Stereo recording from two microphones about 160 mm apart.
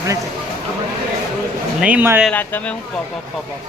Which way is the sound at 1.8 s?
10° right (ahead or behind).